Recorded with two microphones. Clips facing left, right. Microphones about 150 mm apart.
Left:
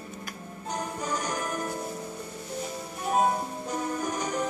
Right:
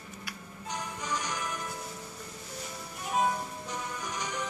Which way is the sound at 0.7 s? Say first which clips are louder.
Left 4 dB; 45° left (ahead or behind).